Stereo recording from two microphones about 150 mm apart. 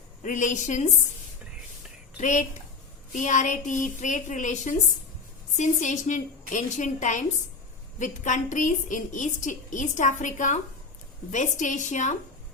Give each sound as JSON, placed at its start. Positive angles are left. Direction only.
{"t": 0.2, "sound": "a woman's voice", "side_deg": 60}
{"t": 2.2, "sound": "a woman's voice", "side_deg": 55}